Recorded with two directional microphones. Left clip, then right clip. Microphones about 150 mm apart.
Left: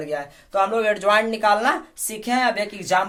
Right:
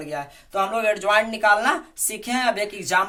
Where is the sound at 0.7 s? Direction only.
45° left (ahead or behind).